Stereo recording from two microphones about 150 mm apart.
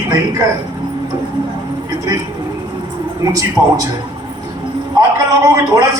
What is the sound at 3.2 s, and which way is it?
Speech, 20° right (ahead or behind).